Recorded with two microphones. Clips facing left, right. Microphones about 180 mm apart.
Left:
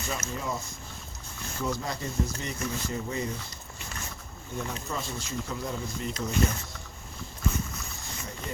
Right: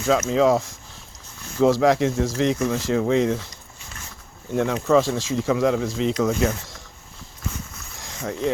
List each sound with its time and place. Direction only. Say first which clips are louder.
0.0 s speech: right 16 dB; 90° right
4.5 s speech: right 16 dB; 90° right
7.9 s vehicle: right 11 dB; 90° right